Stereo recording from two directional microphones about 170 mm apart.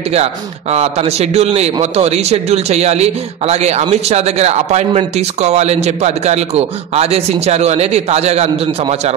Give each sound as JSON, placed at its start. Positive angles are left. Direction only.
{"t": 0.1, "sound": "speech", "side_deg": -40}